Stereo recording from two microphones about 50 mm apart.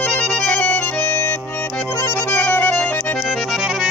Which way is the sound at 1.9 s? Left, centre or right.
Left.